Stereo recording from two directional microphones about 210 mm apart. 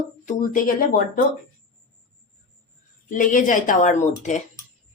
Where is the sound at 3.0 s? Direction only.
40° left (ahead or behind).